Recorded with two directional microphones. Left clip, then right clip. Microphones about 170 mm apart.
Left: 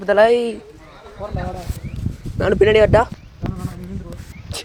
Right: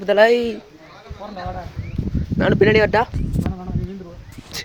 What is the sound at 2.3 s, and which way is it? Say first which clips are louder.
Speech: left 1 dB; 10° right (ahead or behind).